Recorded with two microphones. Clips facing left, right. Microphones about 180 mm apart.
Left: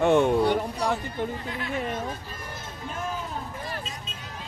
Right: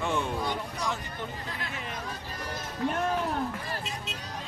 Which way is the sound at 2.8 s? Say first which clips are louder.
Right 6 dB; 70° right (ahead or behind).